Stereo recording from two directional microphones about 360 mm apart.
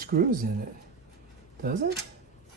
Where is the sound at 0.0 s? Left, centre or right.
Right.